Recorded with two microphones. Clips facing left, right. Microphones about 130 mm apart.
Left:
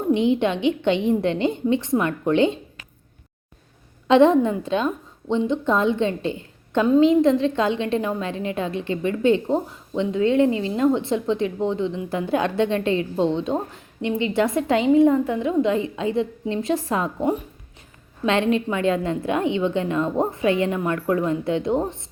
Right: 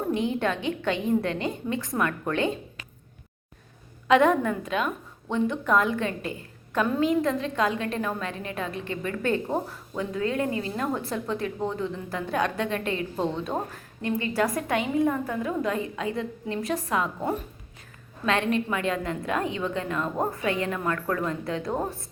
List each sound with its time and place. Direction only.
0.1 s a woman's voice: 25° left (ahead or behind)
4.1 s a woman's voice: 25° left (ahead or behind)
18.3 s a woman's voice: 25° left (ahead or behind)